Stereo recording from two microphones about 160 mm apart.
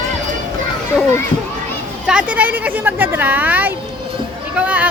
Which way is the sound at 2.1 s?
10° right (ahead or behind).